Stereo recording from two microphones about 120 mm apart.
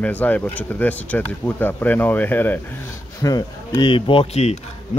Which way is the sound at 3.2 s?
30° left (ahead or behind).